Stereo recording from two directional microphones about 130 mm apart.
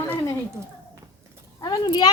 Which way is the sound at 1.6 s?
30° left (ahead or behind).